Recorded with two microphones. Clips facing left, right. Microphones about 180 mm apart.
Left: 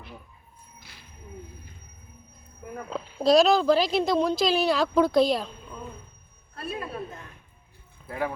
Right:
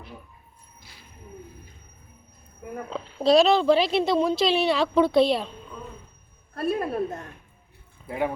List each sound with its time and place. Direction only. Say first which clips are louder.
2.9 s speech: right 1 dB; centre (ahead or behind)
6.5 s a woman's voice: right 8 dB; 45° right (ahead or behind)
8.0 s speech: right 3 dB; 20° right (ahead or behind)